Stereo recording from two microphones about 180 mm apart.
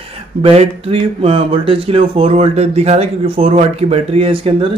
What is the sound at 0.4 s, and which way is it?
Speech, 35° right (ahead or behind).